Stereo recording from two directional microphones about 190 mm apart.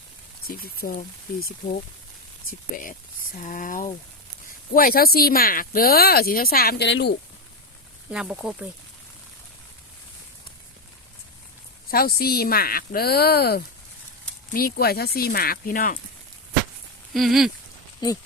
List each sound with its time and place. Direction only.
0.4 s speech: 50° left (ahead or behind); by 7.2 s 65° left (ahead or behind)
8.1 s speech: 5° right (ahead or behind)
11.9 s speech: 55° left (ahead or behind)
17.2 s speech: centre (ahead or behind)
18.0 s speech: 20° left (ahead or behind)